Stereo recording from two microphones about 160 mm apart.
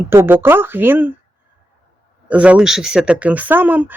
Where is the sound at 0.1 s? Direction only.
15° right (ahead or behind).